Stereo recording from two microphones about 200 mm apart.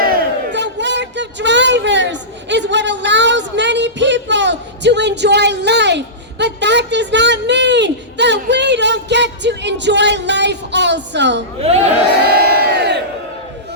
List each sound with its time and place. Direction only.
0.0 s crowd: 55° right (ahead or behind)
6.4 s a sound: 60° right (ahead or behind)
12.3 s crowd: 50° right (ahead or behind)